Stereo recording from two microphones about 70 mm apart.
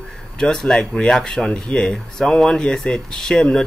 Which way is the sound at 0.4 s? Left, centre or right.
Centre.